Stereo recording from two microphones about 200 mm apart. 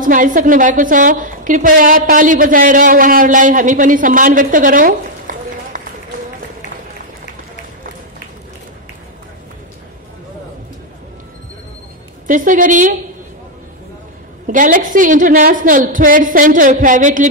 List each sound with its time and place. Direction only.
0.0 s a woman's voice: 40° right (ahead or behind)
12.3 s a woman's voice: 40° right (ahead or behind)
14.4 s a woman's voice: 40° right (ahead or behind)